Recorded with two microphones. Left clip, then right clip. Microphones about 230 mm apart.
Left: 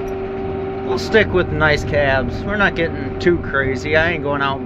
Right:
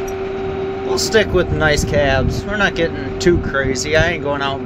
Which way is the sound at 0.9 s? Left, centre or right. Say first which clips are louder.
Even; right.